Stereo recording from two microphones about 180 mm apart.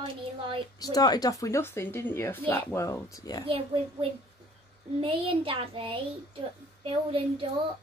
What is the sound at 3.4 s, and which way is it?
A woman's voice, 30° right (ahead or behind).